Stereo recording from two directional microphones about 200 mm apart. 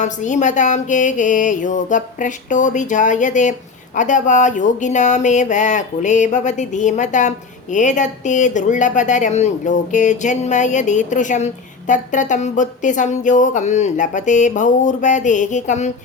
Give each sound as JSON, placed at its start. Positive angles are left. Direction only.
{"t": 0.0, "sound": "speech", "side_deg": 40}